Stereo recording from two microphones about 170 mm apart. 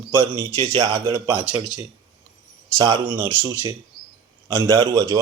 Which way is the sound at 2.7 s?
25° right (ahead or behind).